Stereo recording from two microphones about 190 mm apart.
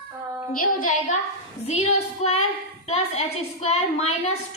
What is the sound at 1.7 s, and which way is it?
A woman's voice, 35° left (ahead or behind).